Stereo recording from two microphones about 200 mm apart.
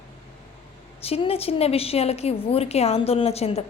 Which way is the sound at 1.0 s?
30° left (ahead or behind).